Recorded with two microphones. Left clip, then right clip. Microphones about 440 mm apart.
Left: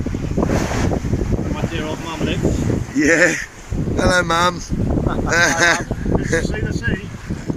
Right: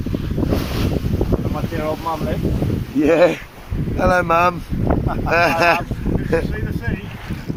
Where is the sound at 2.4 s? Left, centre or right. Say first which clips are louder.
Left 4 dB; left.